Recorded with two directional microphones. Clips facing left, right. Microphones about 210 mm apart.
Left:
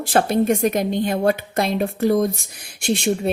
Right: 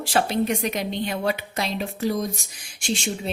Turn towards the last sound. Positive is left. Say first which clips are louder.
# left 7 dB
turn(degrees=60)  # may be behind; listen again after turning